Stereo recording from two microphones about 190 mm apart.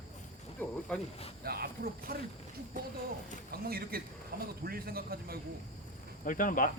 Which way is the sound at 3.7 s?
55° right (ahead or behind).